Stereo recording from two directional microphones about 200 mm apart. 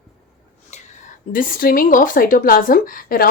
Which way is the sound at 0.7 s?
35° left (ahead or behind).